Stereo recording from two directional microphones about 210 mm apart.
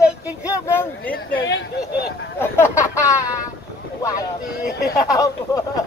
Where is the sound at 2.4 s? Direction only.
15° left (ahead or behind).